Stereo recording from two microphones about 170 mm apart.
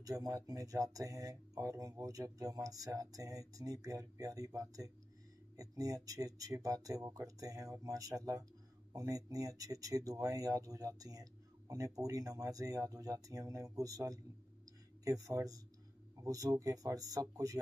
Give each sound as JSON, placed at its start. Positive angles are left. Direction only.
{"t": 0.0, "sound": "speech", "side_deg": -20}